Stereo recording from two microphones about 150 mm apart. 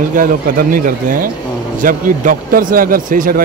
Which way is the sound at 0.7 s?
70° right (ahead or behind).